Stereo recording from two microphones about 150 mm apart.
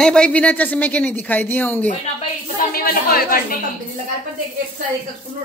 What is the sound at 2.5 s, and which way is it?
Speech, 80° left.